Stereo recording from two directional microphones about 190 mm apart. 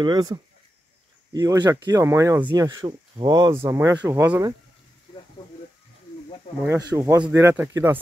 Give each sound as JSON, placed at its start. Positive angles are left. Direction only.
{"t": 0.0, "sound": "speech", "side_deg": -20}
{"t": 6.9, "sound": "speech", "side_deg": -20}